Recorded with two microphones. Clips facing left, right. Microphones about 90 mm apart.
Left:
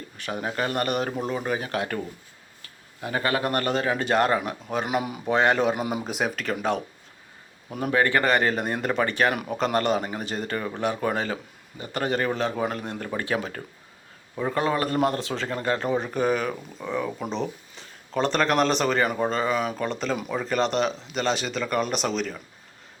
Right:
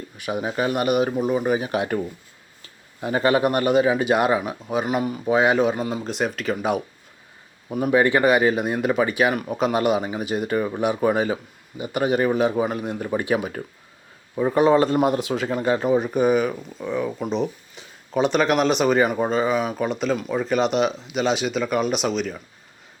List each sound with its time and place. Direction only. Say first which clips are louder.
0.2 s speech: right 4 dB; 10° right (ahead or behind)
5.8 s speech: right 2 dB; 15° left (ahead or behind)
6.1 s speech: right 3 dB; centre (ahead or behind)
7.9 s a man's voice: right 4 dB; 15° right (ahead or behind)